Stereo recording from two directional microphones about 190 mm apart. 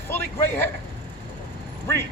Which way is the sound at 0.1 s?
10° left (ahead or behind).